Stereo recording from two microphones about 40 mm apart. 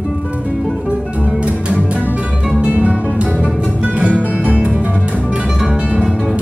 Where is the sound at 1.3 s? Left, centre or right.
Right.